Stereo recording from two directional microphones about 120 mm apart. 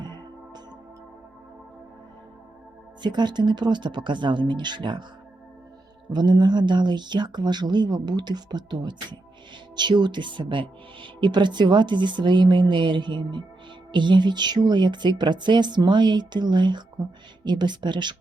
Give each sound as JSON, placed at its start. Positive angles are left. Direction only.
{"t": 0.0, "sound": "music", "side_deg": -35}
{"t": 3.0, "sound": "speech", "side_deg": -40}
{"t": 6.1, "sound": "speech", "side_deg": -40}